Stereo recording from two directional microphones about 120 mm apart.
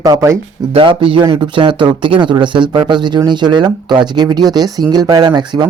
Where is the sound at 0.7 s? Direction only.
45° right (ahead or behind).